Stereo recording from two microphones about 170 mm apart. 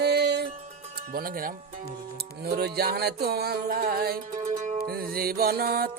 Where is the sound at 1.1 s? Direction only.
55° right (ahead or behind).